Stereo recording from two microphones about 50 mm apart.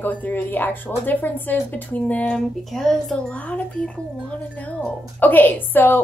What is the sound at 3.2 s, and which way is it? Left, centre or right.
Speech, left.